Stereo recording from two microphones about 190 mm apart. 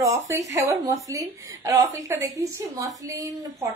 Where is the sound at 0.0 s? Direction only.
15° right (ahead or behind).